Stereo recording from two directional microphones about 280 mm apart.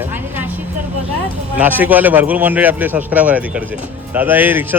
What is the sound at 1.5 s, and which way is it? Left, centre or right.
A man's voice, centre.